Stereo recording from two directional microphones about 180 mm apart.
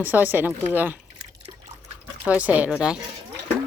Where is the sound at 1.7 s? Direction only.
40° right (ahead or behind).